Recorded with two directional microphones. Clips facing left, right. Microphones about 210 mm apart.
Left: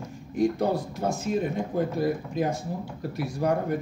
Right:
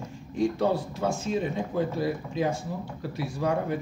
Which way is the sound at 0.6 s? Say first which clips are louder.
Even; 40° left (ahead or behind).